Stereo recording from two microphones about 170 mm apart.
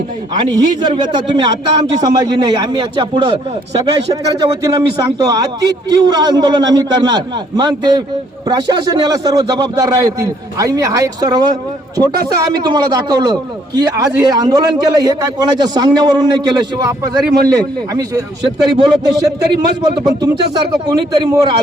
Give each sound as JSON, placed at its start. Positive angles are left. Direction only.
{"t": 0.3, "sound": "a man's voice", "side_deg": -25}